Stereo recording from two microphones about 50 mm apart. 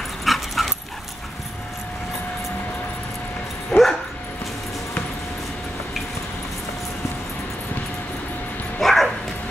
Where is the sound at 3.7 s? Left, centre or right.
Centre.